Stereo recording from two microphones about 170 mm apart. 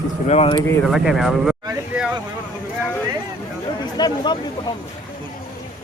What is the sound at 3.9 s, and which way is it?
Speech, 25° left (ahead or behind).